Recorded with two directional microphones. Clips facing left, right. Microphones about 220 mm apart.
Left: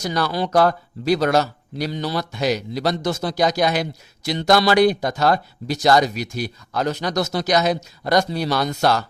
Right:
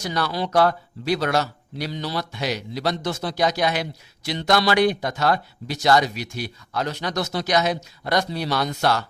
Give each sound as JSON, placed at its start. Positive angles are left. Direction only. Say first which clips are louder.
{"t": 0.0, "sound": "speech", "louder": "left 3 dB", "side_deg": 40}